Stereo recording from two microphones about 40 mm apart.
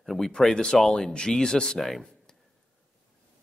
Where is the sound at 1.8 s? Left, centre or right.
Centre.